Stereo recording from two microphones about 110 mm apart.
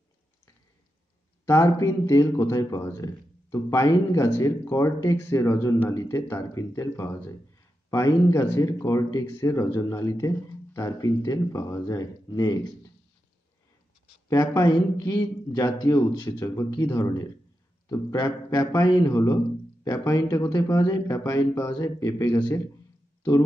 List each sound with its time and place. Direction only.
1.4 s speech: 30° left (ahead or behind)
14.3 s a man's voice: 30° left (ahead or behind)